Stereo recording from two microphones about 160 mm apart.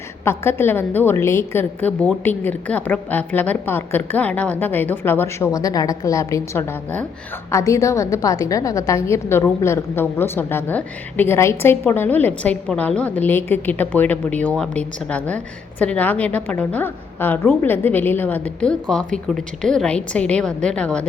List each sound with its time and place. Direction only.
0.3 s a woman's voice: 15° left (ahead or behind)